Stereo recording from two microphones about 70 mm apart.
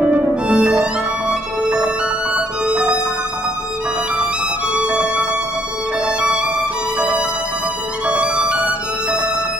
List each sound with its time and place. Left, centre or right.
0.0 s violin: centre
2.3 s music: centre
4.7 s violin: centre
6.0 s music: centre